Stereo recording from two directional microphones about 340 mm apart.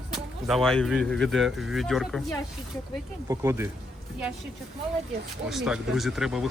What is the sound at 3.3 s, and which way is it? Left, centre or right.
Speech, centre.